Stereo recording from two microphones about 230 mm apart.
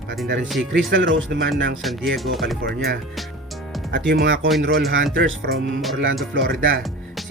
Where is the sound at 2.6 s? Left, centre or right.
Right.